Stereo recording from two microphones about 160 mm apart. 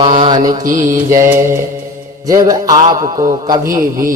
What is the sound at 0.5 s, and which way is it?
Speech, 50° right (ahead or behind).